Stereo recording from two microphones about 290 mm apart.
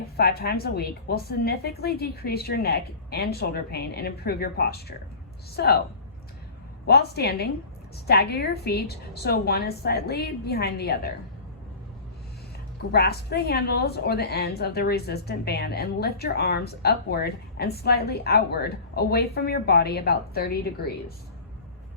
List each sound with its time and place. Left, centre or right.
0.2 s a woman's voice: left
6.8 s a woman's voice: left
12.9 s a woman's voice: left